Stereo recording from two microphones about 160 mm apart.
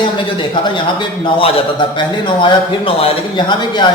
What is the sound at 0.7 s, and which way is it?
A man's voice, 30° left (ahead or behind).